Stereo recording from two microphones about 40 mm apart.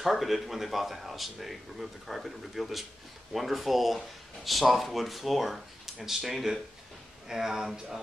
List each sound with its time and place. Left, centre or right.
0.0 s speech: centre